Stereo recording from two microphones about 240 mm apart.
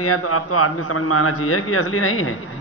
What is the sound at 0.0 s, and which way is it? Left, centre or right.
A man's voice, left.